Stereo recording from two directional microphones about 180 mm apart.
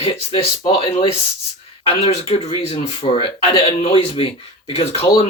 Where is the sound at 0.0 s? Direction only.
30° left (ahead or behind).